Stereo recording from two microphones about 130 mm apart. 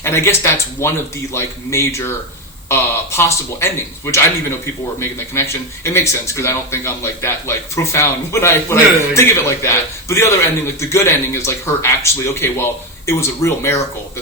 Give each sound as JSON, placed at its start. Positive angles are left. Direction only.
{"t": 0.0, "sound": "speech", "side_deg": 20}